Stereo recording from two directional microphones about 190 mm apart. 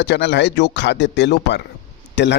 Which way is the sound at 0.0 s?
65° left (ahead or behind).